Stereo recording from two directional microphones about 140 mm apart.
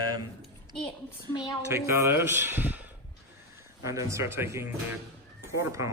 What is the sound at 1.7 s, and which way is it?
Speech, 20° right (ahead or behind).